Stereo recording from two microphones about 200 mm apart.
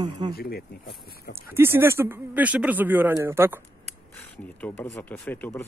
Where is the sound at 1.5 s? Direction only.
10° right (ahead or behind).